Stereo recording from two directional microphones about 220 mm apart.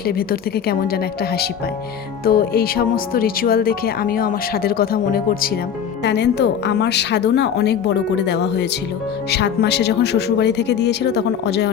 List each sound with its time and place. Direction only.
0.0 s speech: 45° left (ahead or behind)